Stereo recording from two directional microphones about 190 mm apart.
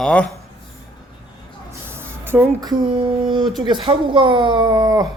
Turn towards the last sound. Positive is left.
turn(degrees=-20)  # may be behind; listen again after turning